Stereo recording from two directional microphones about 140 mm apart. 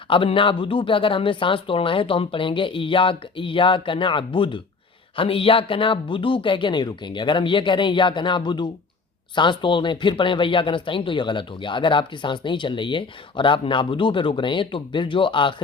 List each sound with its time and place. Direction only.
0.1 s speech: 40° left (ahead or behind)